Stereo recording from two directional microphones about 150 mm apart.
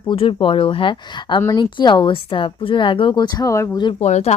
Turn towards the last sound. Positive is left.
turn(degrees=50)  # may be behind; listen again after turning